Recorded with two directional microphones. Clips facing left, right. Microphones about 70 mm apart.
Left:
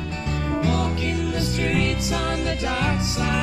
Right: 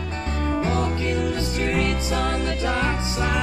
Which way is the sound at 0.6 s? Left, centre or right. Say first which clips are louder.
Left 1 dB; right.